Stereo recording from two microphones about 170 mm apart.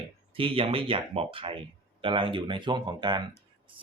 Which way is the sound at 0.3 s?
30° right (ahead or behind).